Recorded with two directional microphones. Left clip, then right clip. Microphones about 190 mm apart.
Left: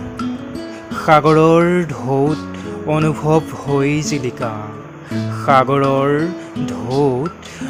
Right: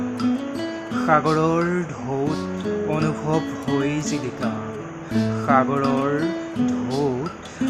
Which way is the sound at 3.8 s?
40° left (ahead or behind).